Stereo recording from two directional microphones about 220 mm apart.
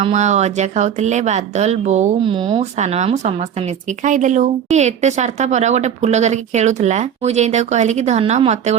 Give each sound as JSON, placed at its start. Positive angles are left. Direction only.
{"t": 0.0, "sound": "a woman's voice", "side_deg": -30}